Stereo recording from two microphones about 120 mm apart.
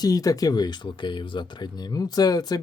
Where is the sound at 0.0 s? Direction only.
30° left (ahead or behind).